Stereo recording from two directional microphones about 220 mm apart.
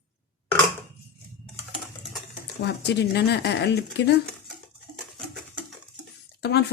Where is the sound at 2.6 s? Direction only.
50° left (ahead or behind).